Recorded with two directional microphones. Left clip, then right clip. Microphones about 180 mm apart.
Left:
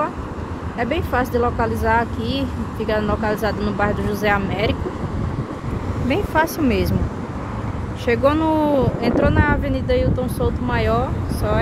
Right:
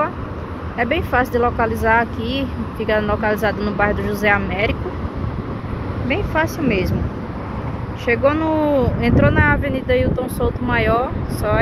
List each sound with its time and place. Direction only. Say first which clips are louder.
0.7 s speech: right 3 dB; 15° left (ahead or behind)
6.0 s speech: left 1 dB; 30° left (ahead or behind)
8.1 s speech: even; 25° left (ahead or behind)